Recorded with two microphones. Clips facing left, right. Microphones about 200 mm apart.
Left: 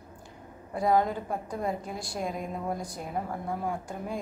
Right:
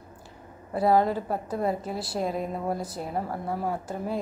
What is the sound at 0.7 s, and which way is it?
A woman's voice, 5° right (ahead or behind).